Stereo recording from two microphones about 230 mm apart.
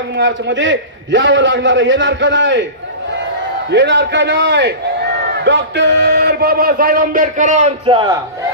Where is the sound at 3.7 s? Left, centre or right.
Right.